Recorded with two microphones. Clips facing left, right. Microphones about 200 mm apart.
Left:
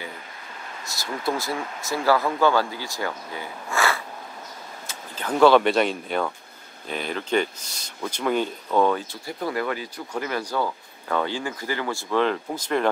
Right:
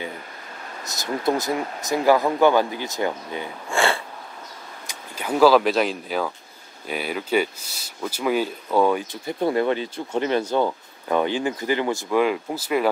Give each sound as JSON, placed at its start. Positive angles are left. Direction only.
{"t": 0.8, "sound": "speech", "side_deg": -20}
{"t": 4.8, "sound": "speech", "side_deg": -10}